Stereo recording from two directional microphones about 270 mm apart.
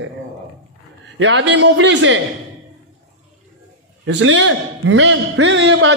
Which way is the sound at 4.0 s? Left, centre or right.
Right.